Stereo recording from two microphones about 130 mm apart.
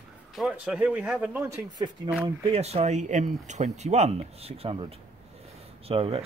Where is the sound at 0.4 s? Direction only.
10° right (ahead or behind).